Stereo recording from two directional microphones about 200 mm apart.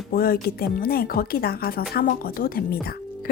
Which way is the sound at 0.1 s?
50° left (ahead or behind).